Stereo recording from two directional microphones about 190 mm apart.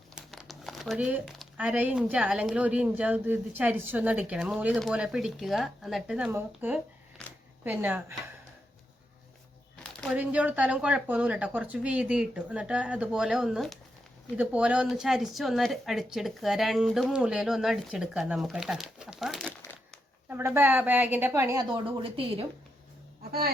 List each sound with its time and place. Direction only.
0.2 s a woman's voice: centre (ahead or behind)
7.2 s a sound: 5° left (ahead or behind)
7.6 s a woman's voice: 10° right (ahead or behind)
10.0 s speech: 5° right (ahead or behind)
20.3 s a woman's voice: 10° right (ahead or behind)
21.8 s speech: 30° right (ahead or behind)